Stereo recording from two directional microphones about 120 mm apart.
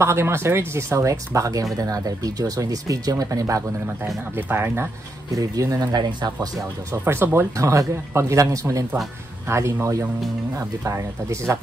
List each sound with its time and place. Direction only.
0.0 s speech: 20° right (ahead or behind)